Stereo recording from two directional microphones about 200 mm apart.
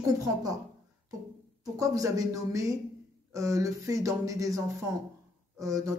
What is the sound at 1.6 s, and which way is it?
Speech, 15° right (ahead or behind).